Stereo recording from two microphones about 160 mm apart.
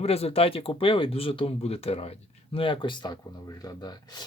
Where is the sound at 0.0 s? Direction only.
40° left (ahead or behind).